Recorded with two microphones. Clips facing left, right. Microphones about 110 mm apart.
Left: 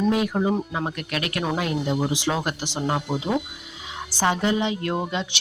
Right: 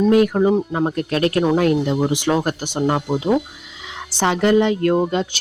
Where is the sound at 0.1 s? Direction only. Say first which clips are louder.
Right 8 dB; 55° right (ahead or behind).